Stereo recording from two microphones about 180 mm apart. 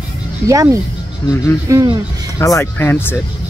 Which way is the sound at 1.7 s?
20° right (ahead or behind).